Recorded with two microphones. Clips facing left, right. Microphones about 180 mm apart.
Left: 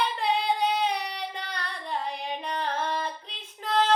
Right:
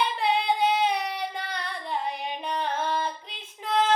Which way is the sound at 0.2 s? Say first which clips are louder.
Right 3 dB; 5° right (ahead or behind).